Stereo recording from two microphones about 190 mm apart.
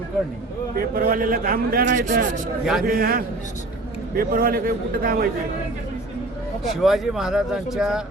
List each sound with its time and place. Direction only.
0.8 s a man's voice: 50° right (ahead or behind)
6.8 s speech: centre (ahead or behind)